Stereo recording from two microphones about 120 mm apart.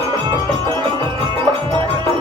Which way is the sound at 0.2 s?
40° right (ahead or behind).